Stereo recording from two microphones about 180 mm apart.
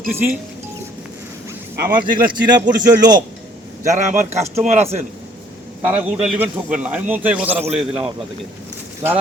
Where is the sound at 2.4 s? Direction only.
25° right (ahead or behind).